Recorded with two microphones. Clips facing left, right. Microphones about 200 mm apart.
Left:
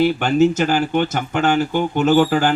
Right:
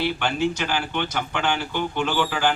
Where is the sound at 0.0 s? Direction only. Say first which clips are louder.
Left 9 dB; 45° left (ahead or behind).